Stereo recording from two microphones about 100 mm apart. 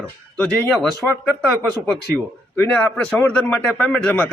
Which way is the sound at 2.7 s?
15° left (ahead or behind).